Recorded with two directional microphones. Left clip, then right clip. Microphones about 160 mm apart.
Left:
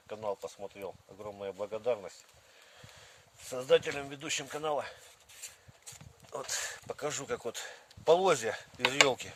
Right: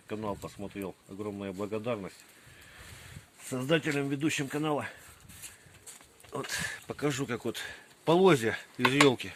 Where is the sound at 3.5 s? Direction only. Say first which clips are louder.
Left 1 dB; 55° left (ahead or behind).